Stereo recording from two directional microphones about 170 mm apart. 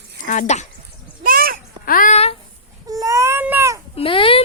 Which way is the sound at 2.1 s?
35° left (ahead or behind).